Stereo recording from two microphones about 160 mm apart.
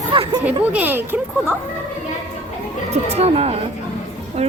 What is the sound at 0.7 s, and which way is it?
Speech, 10° right (ahead or behind).